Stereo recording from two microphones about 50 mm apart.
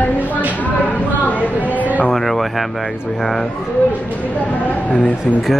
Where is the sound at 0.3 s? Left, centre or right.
Right.